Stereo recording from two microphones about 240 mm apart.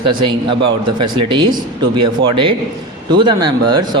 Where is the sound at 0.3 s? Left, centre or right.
Centre.